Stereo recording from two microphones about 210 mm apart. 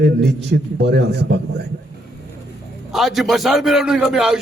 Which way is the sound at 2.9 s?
Centre (ahead or behind).